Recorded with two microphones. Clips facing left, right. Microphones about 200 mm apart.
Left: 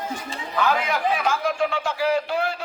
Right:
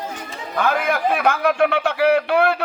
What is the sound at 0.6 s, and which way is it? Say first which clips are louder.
A man's voice: right 3 dB; 55° right (ahead or behind).